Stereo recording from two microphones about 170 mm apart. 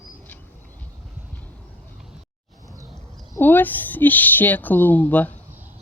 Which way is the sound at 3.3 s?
10° left (ahead or behind).